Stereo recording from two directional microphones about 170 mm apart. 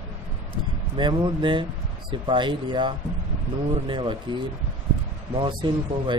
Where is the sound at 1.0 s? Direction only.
25° right (ahead or behind).